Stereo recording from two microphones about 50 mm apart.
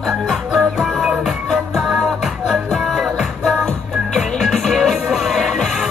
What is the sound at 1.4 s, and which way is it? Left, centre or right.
Music, centre.